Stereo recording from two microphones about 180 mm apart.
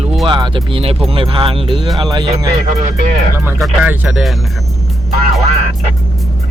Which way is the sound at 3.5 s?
5° right (ahead or behind).